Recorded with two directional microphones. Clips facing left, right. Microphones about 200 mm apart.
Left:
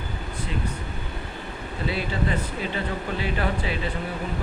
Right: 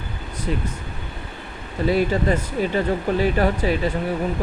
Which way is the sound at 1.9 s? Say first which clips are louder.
Right 8 dB; 45° right (ahead or behind).